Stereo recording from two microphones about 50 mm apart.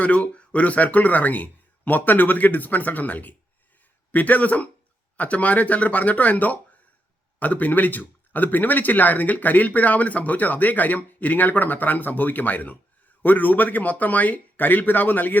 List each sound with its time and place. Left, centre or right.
0.0 s speech: left